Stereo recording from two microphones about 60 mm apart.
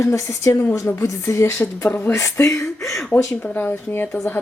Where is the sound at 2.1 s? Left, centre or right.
Left.